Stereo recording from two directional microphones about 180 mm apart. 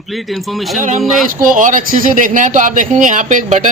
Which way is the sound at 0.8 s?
40° right (ahead or behind).